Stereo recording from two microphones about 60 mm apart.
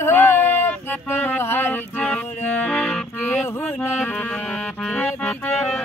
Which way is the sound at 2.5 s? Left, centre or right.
Centre.